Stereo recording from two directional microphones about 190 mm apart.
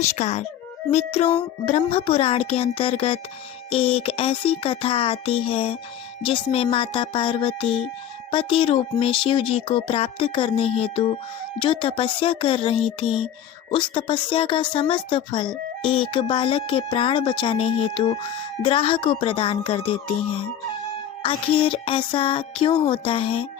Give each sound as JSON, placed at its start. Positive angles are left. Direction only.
{"t": 0.1, "sound": "speech", "side_deg": 35}
{"t": 21.2, "sound": "speech", "side_deg": 30}